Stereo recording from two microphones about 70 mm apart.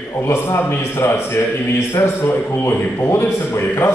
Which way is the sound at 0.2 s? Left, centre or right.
Left.